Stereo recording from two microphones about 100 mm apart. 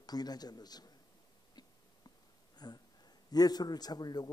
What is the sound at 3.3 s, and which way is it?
A man's voice, 40° left (ahead or behind).